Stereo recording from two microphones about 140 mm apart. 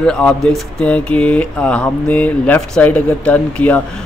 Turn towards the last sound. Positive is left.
turn(degrees=10)  # may be behind; listen again after turning